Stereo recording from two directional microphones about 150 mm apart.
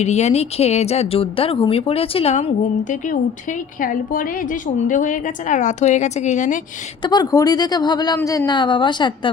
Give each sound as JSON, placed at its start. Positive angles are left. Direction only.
{"t": 0.0, "sound": "speech", "side_deg": 50}
{"t": 3.8, "sound": "a woman's voice", "side_deg": 65}
{"t": 7.0, "sound": "speech", "side_deg": 25}